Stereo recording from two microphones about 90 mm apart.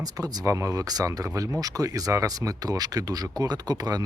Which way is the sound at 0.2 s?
35° right (ahead or behind).